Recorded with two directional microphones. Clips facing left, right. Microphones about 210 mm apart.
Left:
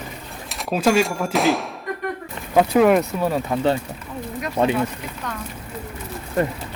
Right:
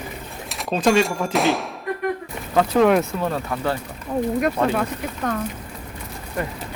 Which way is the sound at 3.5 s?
25° left (ahead or behind).